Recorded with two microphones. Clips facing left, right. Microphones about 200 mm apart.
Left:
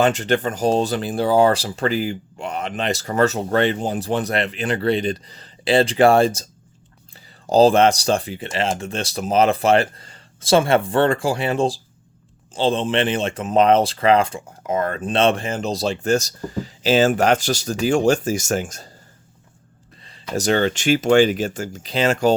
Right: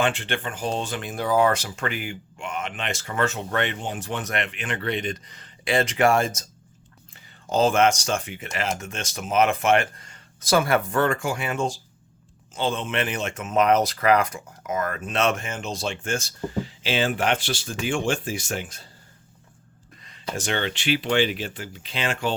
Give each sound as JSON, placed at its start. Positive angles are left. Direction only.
{"t": 0.0, "sound": "speech", "side_deg": 40}
{"t": 20.0, "sound": "a sound", "side_deg": 30}
{"t": 20.3, "sound": "speech", "side_deg": 40}